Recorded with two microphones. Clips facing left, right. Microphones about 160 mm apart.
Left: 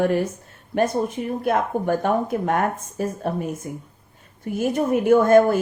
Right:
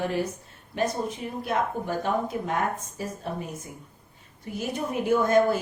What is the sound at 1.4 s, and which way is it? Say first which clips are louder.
A woman's voice: left 6 dB; 55° left (ahead or behind).